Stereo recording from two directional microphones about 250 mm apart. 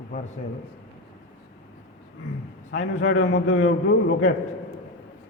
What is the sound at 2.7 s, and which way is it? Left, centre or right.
A man's voice, left.